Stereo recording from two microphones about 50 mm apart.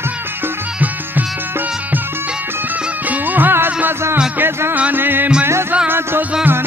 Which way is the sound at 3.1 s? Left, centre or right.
Right.